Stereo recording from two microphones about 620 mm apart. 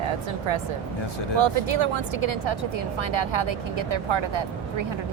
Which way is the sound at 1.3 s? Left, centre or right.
Right.